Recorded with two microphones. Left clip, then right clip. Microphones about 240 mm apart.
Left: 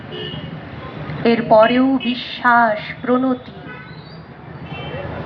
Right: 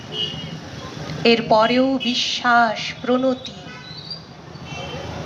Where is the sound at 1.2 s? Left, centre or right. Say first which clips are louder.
Left 3 dB; right.